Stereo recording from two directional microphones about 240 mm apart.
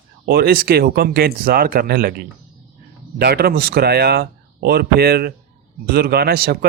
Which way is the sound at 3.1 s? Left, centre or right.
Right.